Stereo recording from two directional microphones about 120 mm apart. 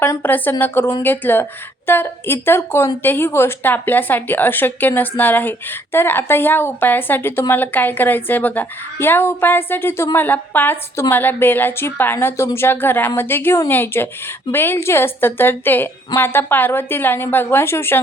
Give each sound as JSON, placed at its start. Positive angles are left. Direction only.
{"t": 0.0, "sound": "a woman's voice", "side_deg": 20}